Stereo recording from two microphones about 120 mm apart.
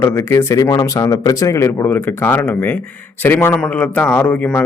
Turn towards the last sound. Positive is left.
turn(degrees=15)  # may be behind; listen again after turning